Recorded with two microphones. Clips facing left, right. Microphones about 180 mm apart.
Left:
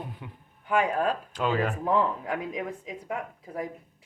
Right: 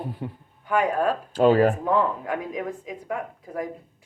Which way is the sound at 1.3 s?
35° right (ahead or behind).